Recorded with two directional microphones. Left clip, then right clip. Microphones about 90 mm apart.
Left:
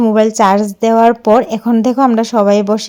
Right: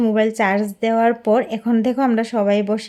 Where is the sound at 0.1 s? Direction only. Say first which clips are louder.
Left 10 dB; 40° left (ahead or behind).